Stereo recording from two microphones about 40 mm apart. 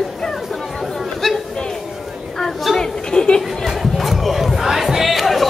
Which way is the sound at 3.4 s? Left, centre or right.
Centre.